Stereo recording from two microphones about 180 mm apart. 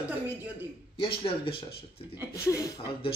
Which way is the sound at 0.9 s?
30° left (ahead or behind).